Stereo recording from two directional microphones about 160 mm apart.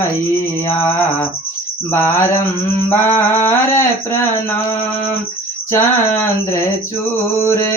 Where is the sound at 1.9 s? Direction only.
15° left (ahead or behind).